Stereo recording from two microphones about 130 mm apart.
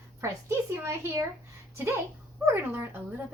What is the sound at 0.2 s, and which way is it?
A woman's voice, 20° right (ahead or behind).